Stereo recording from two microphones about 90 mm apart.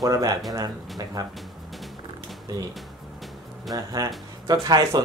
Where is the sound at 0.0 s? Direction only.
40° right (ahead or behind).